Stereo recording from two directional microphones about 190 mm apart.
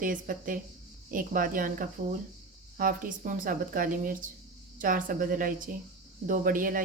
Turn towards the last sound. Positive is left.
turn(degrees=-45)  # may be behind; listen again after turning